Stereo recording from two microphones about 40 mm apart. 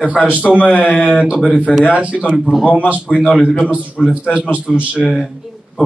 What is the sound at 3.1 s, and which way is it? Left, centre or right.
Speech, left.